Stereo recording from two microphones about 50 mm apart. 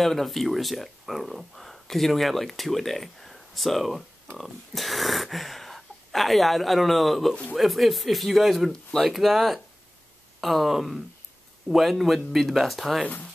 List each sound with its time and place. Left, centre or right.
0.0 s speech: centre
13.0 s speech: left